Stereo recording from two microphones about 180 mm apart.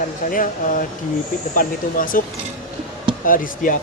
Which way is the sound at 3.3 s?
50° left (ahead or behind).